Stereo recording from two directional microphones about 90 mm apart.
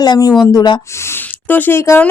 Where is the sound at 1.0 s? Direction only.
25° left (ahead or behind).